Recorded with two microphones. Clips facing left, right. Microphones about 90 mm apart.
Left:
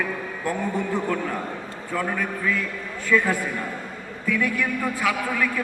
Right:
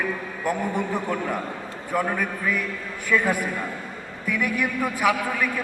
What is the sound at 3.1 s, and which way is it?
A man's voice, 15° right (ahead or behind).